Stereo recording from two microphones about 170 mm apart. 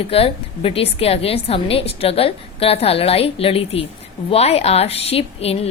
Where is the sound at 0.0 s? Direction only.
35° left (ahead or behind).